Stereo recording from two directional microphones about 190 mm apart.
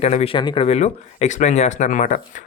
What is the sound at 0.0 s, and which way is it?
Speech, 35° left (ahead or behind).